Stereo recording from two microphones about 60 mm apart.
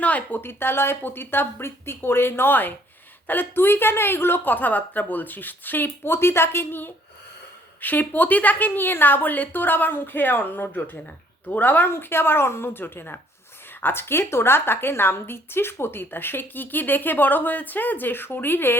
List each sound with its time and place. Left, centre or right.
0.0 s speech: left
0.4 s a woman's voice: left